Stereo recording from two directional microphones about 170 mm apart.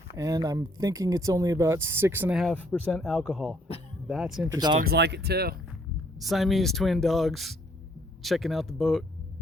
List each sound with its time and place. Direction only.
0.2 s speech: 20° right (ahead or behind)
2.4 s speech: 5° left (ahead or behind)
4.5 s speech: 25° right (ahead or behind)
4.8 s speech: 75° right (ahead or behind)
6.1 s speech: centre (ahead or behind)